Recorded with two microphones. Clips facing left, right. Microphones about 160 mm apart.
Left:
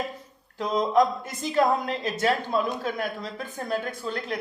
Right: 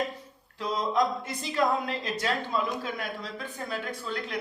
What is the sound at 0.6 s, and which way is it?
Speech, 45° left (ahead or behind).